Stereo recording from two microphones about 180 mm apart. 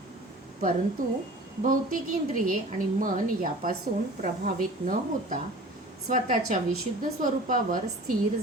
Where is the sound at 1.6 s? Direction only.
50° right (ahead or behind).